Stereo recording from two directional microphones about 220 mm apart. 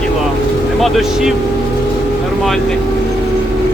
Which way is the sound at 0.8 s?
Centre (ahead or behind).